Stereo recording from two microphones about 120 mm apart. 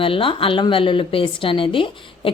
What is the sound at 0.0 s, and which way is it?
A woman's voice, 45° left (ahead or behind).